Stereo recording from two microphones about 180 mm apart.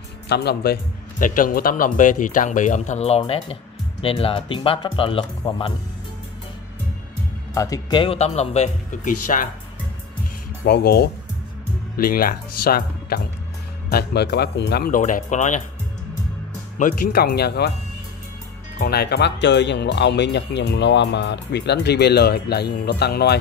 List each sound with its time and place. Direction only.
0.3 s speech: 65° left (ahead or behind)
1.2 s speech: 50° left (ahead or behind); by 5.7 s 30° left (ahead or behind)
7.5 s speech: 20° left (ahead or behind); by 9.5 s 45° left (ahead or behind)
10.6 s speech: 60° left (ahead or behind)
15.0 s speech: 45° left (ahead or behind)
16.7 s speech: 50° left (ahead or behind)
18.8 s speech: 65° left (ahead or behind)